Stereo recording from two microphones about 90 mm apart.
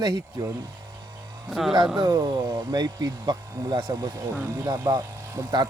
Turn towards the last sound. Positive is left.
turn(degrees=-40)  # may be behind; listen again after turning